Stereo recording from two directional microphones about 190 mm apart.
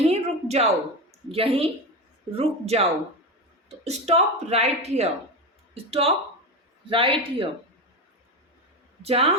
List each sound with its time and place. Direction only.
0.0 s a sound: 35° right (ahead or behind)
1.3 s a man's voice: 30° right (ahead or behind)
3.8 s a man's voice: 35° right (ahead or behind)
9.0 s speech: 30° right (ahead or behind)